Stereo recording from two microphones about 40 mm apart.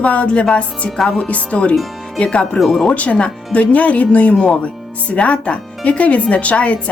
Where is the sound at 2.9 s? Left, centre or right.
Left.